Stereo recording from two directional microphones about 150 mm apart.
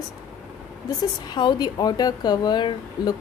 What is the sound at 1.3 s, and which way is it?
Speech, 30° left (ahead or behind).